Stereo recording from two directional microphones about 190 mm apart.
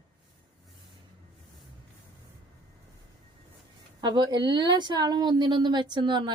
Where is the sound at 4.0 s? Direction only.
20° right (ahead or behind).